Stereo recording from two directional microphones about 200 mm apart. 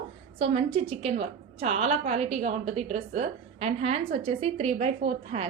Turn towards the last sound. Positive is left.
turn(degrees=-35)  # may be behind; listen again after turning